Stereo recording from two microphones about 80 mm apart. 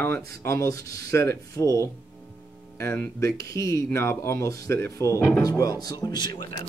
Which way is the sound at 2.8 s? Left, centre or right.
Left.